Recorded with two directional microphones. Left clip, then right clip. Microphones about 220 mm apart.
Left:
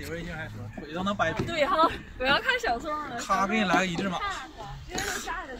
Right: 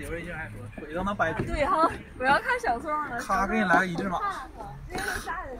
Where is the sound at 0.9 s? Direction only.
40° left (ahead or behind).